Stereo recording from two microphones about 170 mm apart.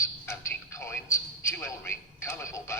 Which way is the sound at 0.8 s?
10° left (ahead or behind).